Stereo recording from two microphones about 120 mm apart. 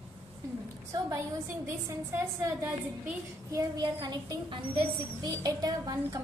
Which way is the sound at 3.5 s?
35° right (ahead or behind).